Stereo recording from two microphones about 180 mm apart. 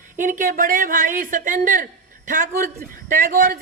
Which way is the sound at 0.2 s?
50° right (ahead or behind).